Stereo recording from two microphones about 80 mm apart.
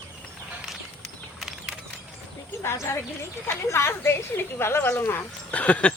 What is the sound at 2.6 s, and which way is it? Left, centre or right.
Speech, left.